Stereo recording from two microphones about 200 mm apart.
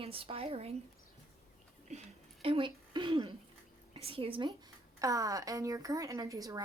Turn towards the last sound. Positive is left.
turn(degrees=-15)  # may be behind; listen again after turning